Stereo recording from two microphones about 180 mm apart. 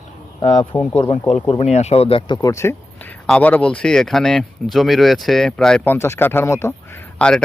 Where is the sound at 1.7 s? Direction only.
35° left (ahead or behind); by 6.7 s 15° left (ahead or behind).